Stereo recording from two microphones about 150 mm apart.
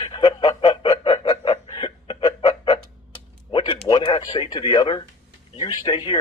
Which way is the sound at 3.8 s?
35° left (ahead or behind).